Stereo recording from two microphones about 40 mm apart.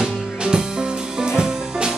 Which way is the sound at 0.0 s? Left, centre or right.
Centre.